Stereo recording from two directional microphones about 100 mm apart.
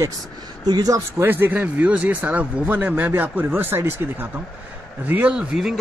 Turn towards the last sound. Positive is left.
turn(degrees=-5)  # may be behind; listen again after turning